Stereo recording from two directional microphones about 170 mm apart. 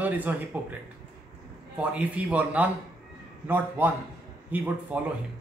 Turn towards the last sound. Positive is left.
turn(degrees=-10)  # may be behind; listen again after turning